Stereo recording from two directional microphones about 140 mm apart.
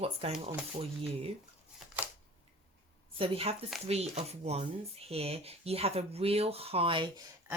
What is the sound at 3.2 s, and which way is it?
Speech, 40° right (ahead or behind).